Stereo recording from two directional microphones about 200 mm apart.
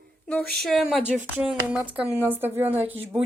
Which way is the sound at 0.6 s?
Centre (ahead or behind).